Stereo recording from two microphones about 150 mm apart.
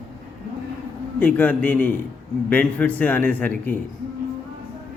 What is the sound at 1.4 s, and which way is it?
A man's voice, 10° left (ahead or behind).